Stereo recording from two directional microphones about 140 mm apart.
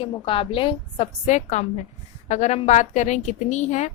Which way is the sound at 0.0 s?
40° left (ahead or behind).